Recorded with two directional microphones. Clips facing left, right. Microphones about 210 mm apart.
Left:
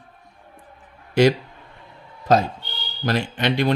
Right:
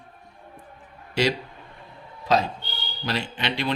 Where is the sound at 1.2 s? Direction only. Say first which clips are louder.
Left 7 dB; 50° left (ahead or behind).